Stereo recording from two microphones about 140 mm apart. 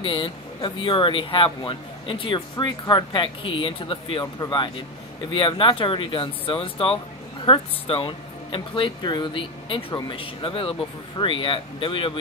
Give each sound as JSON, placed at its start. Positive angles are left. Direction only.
{"t": 0.0, "sound": "speech", "side_deg": 35}